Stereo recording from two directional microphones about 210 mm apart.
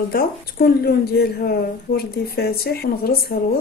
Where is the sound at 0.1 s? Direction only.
45° left (ahead or behind).